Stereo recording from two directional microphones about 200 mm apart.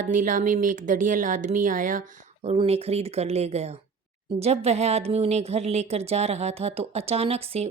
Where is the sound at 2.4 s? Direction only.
30° right (ahead or behind).